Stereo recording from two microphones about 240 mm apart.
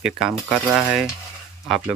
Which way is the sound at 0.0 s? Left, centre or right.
Centre.